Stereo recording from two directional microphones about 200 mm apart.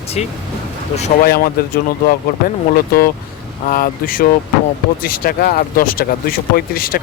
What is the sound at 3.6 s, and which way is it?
Speech, 45° left (ahead or behind).